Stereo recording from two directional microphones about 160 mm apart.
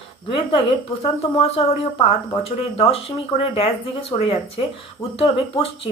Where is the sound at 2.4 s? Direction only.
40° left (ahead or behind).